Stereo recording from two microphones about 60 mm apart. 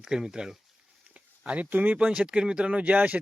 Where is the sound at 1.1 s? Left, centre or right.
Right.